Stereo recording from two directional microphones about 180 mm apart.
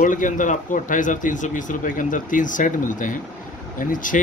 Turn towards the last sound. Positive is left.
turn(degrees=50)  # may be behind; listen again after turning